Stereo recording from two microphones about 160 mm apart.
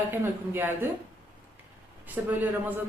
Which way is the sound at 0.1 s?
15° right (ahead or behind).